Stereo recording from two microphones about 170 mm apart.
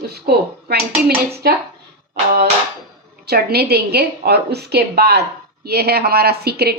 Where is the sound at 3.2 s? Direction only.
70° right (ahead or behind).